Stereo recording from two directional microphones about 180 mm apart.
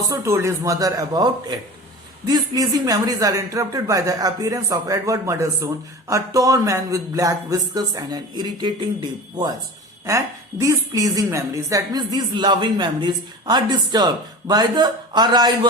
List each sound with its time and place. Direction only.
0.1 s a woman's voice: 15° right (ahead or behind)